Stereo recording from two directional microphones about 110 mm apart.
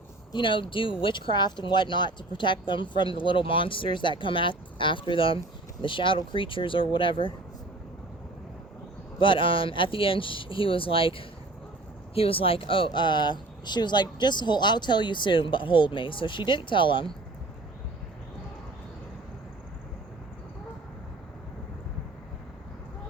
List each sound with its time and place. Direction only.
0.3 s speech: 50° left (ahead or behind)
9.1 s speech: 50° left (ahead or behind)